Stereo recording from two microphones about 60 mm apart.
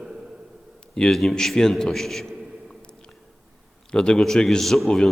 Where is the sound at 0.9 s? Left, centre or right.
Centre.